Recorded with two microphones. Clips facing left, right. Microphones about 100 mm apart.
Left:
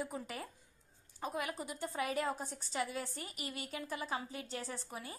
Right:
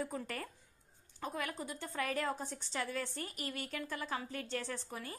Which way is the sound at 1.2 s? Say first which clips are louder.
Left 1 dB; 20° left (ahead or behind).